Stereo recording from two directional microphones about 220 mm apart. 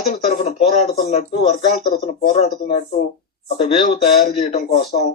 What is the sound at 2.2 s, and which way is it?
Speech, 30° left (ahead or behind).